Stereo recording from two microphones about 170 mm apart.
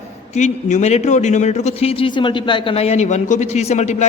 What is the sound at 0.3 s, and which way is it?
A woman's voice, 45° left (ahead or behind).